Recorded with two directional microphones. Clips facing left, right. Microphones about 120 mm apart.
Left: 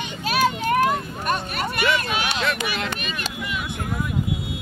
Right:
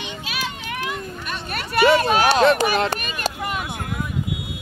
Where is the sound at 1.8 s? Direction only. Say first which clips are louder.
Right 9 dB; 40° right (ahead or behind).